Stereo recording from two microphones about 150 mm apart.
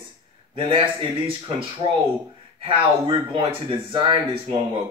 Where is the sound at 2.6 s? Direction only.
35° right (ahead or behind).